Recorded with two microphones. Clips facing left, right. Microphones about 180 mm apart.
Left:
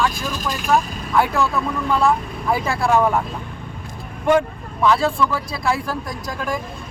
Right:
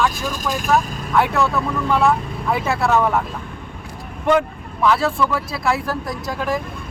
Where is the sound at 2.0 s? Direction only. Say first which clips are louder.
Even; centre (ahead or behind).